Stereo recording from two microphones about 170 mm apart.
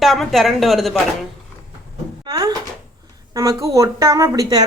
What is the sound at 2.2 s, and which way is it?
A woman's voice, 25° right (ahead or behind).